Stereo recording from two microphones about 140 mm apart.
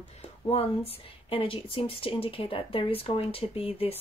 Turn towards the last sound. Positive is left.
turn(degrees=45)  # may be behind; listen again after turning